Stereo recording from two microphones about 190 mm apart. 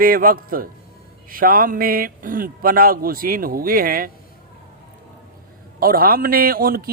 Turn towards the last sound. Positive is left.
turn(degrees=-50)  # may be behind; listen again after turning